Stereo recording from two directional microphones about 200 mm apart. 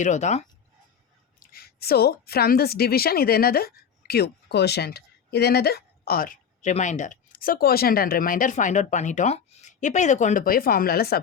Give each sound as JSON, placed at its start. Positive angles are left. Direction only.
{"t": 0.0, "sound": "speech", "side_deg": 35}
{"t": 1.4, "sound": "a woman's voice", "side_deg": 50}